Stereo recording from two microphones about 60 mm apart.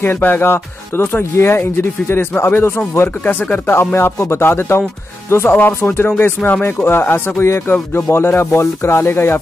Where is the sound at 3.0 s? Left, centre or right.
Left.